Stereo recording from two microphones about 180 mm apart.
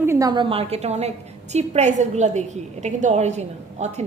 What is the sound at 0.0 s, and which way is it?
A woman's voice, 15° right (ahead or behind).